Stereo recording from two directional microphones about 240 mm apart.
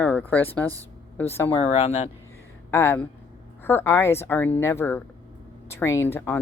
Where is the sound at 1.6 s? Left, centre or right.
Left.